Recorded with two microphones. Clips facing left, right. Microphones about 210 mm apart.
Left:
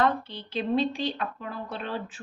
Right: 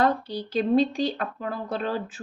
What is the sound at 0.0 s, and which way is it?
Speech, 40° right (ahead or behind).